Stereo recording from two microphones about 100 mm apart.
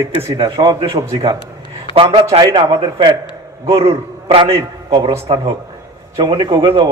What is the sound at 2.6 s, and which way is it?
Speech, 50° right (ahead or behind).